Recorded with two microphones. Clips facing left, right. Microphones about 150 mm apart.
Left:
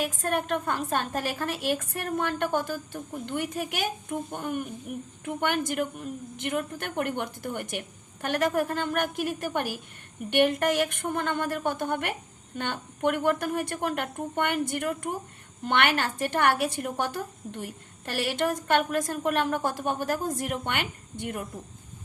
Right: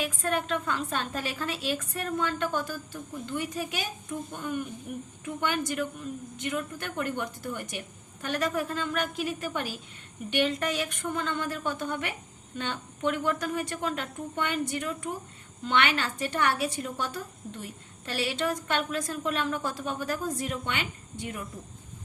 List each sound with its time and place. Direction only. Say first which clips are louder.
0.0 s a woman's voice: left 1 dB; 45° left (ahead or behind)